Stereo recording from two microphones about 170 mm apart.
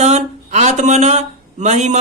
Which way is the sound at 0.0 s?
40° right (ahead or behind).